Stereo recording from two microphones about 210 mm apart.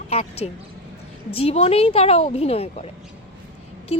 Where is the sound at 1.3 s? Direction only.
30° left (ahead or behind).